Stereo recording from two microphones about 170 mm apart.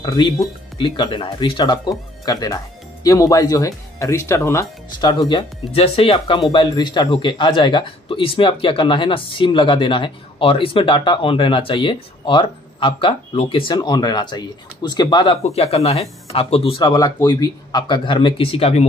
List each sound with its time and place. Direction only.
0.0 s speech: 25° left (ahead or behind)
5.3 s speech: 35° left (ahead or behind)
15.4 s speech: 40° left (ahead or behind)